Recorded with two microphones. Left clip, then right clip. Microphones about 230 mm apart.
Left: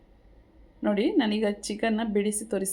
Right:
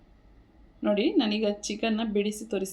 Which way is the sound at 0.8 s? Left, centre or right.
Centre.